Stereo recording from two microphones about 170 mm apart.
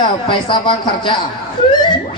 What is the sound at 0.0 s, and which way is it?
A man's voice, 25° left (ahead or behind).